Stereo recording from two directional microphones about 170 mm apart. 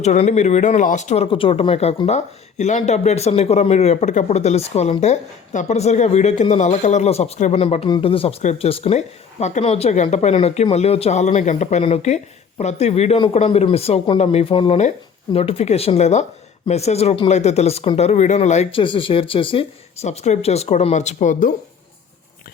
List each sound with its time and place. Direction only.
0.0 s speech: 45° left (ahead or behind)